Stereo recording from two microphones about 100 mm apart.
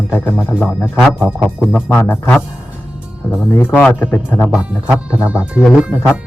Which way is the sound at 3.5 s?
25° left (ahead or behind).